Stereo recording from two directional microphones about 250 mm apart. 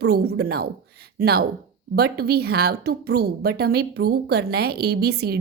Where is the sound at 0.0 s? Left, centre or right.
Right.